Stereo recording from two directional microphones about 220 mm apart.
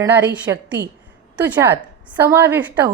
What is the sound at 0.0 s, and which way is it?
A woman's voice, 10° right (ahead or behind).